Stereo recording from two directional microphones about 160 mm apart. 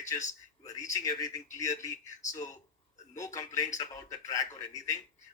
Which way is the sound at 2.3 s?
20° left (ahead or behind).